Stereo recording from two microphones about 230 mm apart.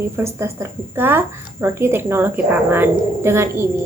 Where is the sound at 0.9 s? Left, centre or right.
Centre.